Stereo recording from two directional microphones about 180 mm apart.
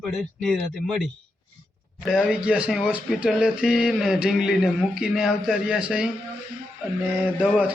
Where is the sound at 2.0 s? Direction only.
Centre (ahead or behind).